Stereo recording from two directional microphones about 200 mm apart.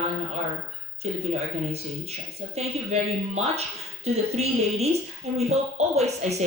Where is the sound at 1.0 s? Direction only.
35° right (ahead or behind).